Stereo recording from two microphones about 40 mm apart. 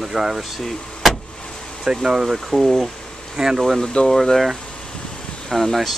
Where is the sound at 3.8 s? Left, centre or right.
Centre.